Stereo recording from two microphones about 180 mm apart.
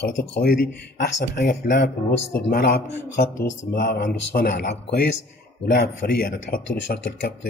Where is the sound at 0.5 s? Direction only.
55° left (ahead or behind).